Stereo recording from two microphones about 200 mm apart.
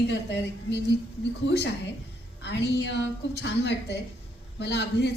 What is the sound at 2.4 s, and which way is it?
A woman's voice, 60° left (ahead or behind).